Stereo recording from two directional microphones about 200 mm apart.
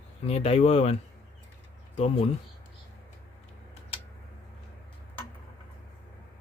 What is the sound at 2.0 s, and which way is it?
Speech, 30° left (ahead or behind).